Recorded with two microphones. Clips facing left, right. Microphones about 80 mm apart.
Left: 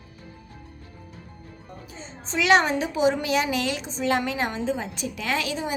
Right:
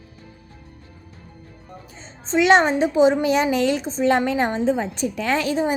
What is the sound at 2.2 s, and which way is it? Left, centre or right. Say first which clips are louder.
A woman's voice: right 4 dB; right.